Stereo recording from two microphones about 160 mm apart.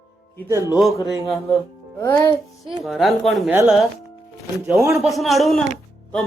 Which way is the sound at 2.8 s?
Centre (ahead or behind).